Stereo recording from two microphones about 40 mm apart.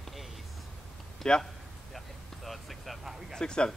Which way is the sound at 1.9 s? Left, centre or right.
Centre.